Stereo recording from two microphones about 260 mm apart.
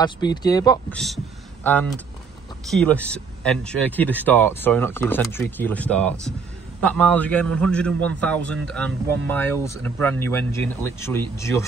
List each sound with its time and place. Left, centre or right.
0.0 s speech: centre
0.8 s a man's voice: centre